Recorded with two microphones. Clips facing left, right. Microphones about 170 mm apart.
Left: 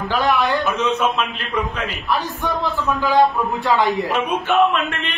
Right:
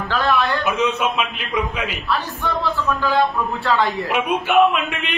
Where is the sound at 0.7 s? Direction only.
10° right (ahead or behind).